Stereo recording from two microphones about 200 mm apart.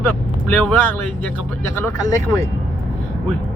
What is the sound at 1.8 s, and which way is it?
Speech, 15° left (ahead or behind).